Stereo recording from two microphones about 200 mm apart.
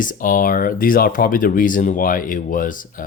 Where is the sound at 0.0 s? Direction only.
40° left (ahead or behind).